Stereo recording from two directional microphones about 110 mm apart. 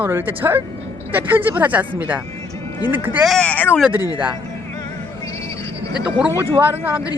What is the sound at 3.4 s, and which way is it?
Speech, 15° left (ahead or behind).